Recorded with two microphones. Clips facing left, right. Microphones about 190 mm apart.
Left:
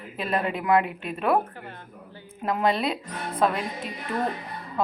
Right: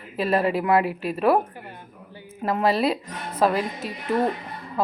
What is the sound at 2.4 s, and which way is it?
A woman's voice, centre (ahead or behind).